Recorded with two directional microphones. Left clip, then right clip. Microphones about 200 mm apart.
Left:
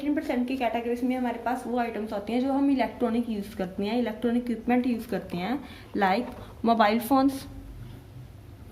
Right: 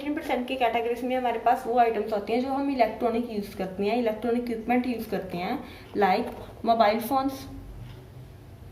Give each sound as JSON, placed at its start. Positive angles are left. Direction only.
{"t": 0.0, "sound": "a woman's voice", "side_deg": 25}